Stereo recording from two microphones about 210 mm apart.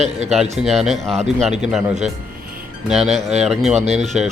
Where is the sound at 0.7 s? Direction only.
Centre (ahead or behind).